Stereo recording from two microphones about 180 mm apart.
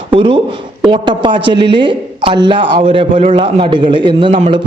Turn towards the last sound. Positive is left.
turn(degrees=-30)  # may be behind; listen again after turning